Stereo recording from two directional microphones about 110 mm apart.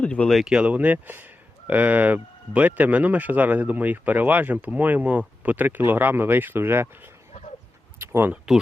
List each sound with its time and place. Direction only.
0.0 s speech: 10° left (ahead or behind)
0.3 s speech: 5° right (ahead or behind)
7.9 s a sound: 20° right (ahead or behind)
8.3 s speech: 5° right (ahead or behind)